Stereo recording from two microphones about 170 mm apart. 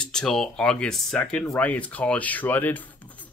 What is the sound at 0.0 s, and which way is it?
Speech, 5° left (ahead or behind).